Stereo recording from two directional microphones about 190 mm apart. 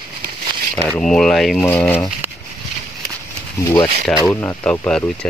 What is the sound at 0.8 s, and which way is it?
Speech, 5° left (ahead or behind).